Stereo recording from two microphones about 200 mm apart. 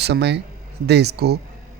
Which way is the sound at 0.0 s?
55° right (ahead or behind).